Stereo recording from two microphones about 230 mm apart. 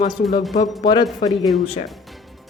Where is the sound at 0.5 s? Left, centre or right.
Left.